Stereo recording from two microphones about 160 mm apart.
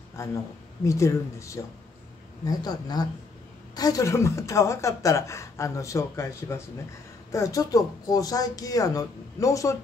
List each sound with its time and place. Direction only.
0.2 s a woman's voice: 20° left (ahead or behind)